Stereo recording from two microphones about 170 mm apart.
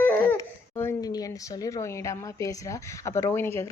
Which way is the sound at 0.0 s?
15° left (ahead or behind).